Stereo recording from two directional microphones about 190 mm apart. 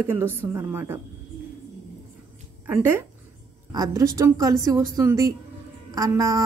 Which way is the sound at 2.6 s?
10° right (ahead or behind).